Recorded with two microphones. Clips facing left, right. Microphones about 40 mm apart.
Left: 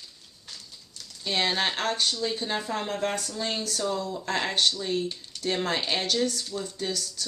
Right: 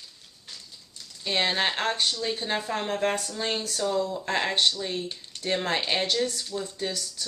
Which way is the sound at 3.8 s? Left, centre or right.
Centre.